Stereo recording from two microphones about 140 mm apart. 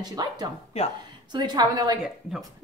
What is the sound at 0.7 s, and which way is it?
Speech, 45° left (ahead or behind).